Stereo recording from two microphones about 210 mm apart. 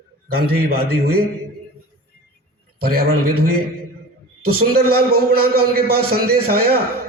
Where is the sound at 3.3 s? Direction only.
90° right.